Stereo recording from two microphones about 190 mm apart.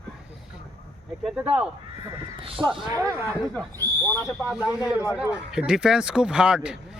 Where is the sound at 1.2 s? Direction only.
5° right (ahead or behind).